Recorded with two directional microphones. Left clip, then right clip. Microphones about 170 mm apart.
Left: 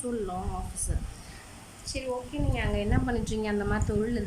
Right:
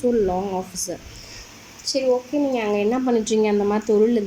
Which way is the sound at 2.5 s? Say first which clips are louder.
Right 7 dB; 20° right (ahead or behind).